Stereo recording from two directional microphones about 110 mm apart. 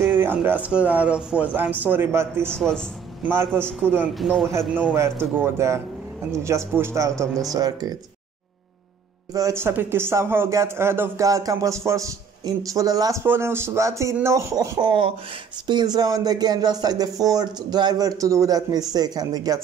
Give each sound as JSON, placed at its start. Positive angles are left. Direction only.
{"t": 0.0, "sound": "speech", "side_deg": -20}
{"t": 2.5, "sound": "speech", "side_deg": 5}
{"t": 3.3, "sound": "a man's voice", "side_deg": -20}
{"t": 4.2, "sound": "a man's voice", "side_deg": 0}
{"t": 4.9, "sound": "a man's voice", "side_deg": -25}
{"t": 7.5, "sound": "speech", "side_deg": -35}
{"t": 9.3, "sound": "a man's voice", "side_deg": -25}
{"t": 13.2, "sound": "a man's voice", "side_deg": -20}